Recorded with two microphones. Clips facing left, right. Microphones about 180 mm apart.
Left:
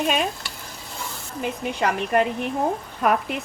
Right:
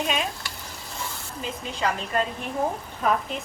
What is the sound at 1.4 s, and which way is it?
A woman's voice, 65° left (ahead or behind).